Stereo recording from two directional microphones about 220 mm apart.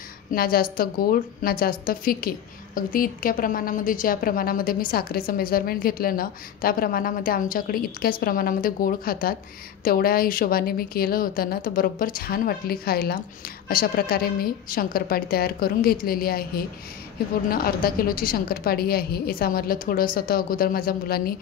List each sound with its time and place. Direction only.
0.3 s a woman's voice: 40° left (ahead or behind)